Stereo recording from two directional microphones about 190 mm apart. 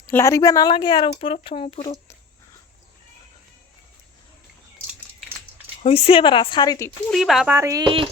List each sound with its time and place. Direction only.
0.1 s speech: 15° left (ahead or behind); by 1.9 s 35° left (ahead or behind)
5.8 s speech: 30° left (ahead or behind)
7.1 s speech: centre (ahead or behind)
7.5 s speech: 15° right (ahead or behind)